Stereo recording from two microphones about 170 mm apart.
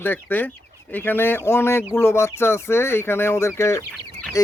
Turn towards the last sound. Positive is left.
turn(degrees=15)  # may be behind; listen again after turning